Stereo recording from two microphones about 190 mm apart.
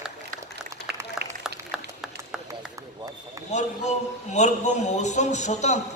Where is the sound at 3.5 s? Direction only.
40° left (ahead or behind).